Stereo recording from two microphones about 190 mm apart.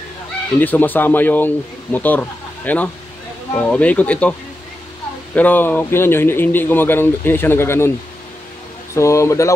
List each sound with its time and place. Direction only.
0.6 s speech: 10° left (ahead or behind)
8.9 s speech: 15° left (ahead or behind)